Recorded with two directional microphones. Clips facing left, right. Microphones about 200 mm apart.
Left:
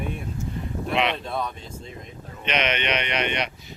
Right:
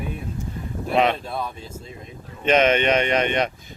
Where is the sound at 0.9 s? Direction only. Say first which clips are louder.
Right 5 dB; 45° right (ahead or behind).